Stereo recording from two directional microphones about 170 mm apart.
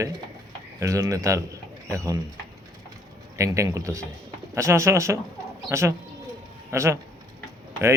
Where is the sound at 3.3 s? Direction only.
15° right (ahead or behind).